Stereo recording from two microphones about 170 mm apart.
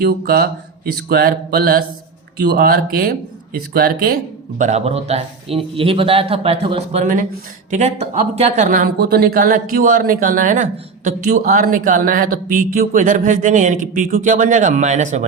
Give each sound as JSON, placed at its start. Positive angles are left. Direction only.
{"t": 0.0, "sound": "speech", "side_deg": -65}